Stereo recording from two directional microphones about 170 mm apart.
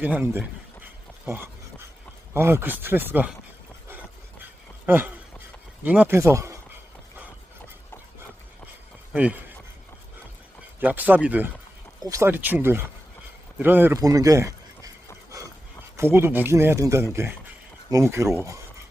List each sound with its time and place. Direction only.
0.0 s speech: 10° right (ahead or behind)
3.8 s a sound: 10° right (ahead or behind)
4.9 s speech: 10° right (ahead or behind)
9.1 s speech: 10° right (ahead or behind)
10.8 s speech: 10° right (ahead or behind)
16.0 s speech: 15° right (ahead or behind)